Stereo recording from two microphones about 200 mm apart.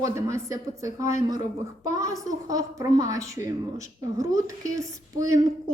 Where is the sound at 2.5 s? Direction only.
15° right (ahead or behind).